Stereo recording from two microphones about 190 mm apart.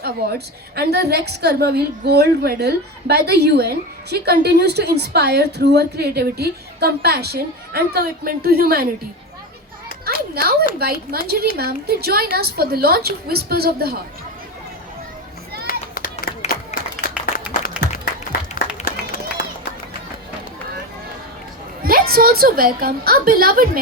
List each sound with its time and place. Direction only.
0.0 s a woman's voice: 55° right (ahead or behind)
10.1 s a sound: 55° right (ahead or behind)
10.8 s a woman's voice: 55° right (ahead or behind)
15.6 s children playing: 50° left (ahead or behind)
17.0 s applause: 50° left (ahead or behind)
18.9 s run: 50° left (ahead or behind)
21.8 s a woman's voice: 50° right (ahead or behind)